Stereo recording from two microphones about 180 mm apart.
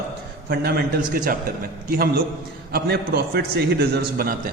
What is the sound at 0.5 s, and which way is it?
A man's voice, 65° right (ahead or behind).